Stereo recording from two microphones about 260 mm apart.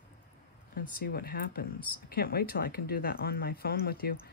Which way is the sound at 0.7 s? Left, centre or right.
Left.